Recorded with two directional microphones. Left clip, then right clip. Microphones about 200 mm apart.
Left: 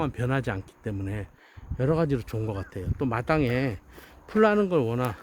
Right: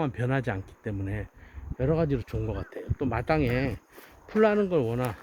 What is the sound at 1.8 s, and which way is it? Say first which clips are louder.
Speech: left 1 dB; 30° left (ahead or behind).